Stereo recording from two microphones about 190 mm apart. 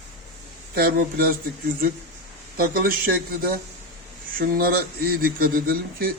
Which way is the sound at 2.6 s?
50° right (ahead or behind).